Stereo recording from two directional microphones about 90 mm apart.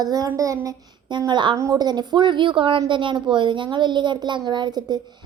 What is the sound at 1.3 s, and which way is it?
Speech, 55° right (ahead or behind).